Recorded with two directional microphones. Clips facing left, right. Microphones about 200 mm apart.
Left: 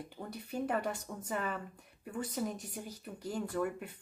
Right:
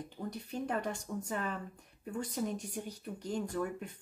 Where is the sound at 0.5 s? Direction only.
5° left (ahead or behind).